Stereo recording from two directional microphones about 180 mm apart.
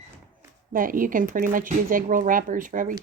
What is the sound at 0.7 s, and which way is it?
Speech, 50° right (ahead or behind).